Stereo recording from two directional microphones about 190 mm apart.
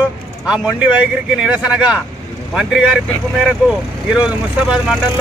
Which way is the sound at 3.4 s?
5° right (ahead or behind).